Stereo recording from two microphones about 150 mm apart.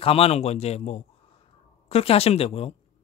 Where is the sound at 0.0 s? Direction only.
40° left (ahead or behind).